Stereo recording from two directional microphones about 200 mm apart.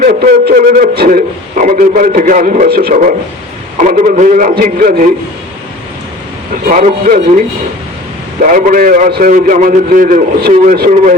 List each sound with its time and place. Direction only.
0.0 s a man's voice: 45° right (ahead or behind)
6.7 s a man's voice: 40° right (ahead or behind)
8.4 s a man's voice: 40° right (ahead or behind)